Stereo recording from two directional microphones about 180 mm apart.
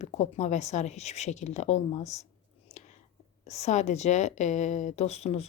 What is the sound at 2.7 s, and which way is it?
Whispering, 35° left (ahead or behind).